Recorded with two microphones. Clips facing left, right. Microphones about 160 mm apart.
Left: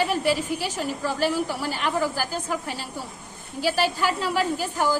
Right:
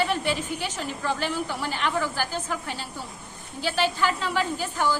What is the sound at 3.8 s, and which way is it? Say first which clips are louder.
Speech: right 2 dB; 10° left (ahead or behind).